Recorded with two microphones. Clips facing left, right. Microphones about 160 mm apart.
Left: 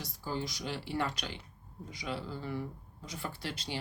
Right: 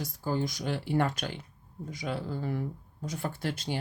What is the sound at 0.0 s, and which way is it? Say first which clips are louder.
Speech: right 6 dB; 50° right (ahead or behind).